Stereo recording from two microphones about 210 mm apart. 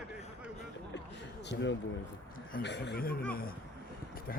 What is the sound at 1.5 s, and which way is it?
Speech, 50° left (ahead or behind).